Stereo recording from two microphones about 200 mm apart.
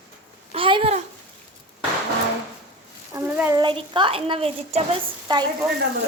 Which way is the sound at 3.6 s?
25° right (ahead or behind).